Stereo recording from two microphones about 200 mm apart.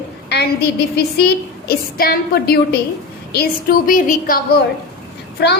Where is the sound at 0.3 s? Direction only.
55° left (ahead or behind).